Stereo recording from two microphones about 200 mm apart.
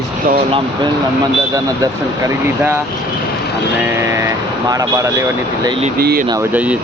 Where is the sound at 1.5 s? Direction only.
15° right (ahead or behind).